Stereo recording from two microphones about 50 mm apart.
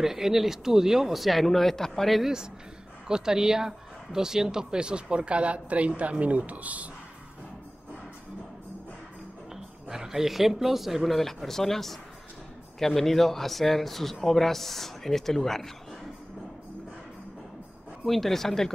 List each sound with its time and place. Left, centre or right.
0.0 s speech: centre
2.2 s a woman's voice: centre; by 6.9 s right
9.5 s speech: centre
18.0 s speech: centre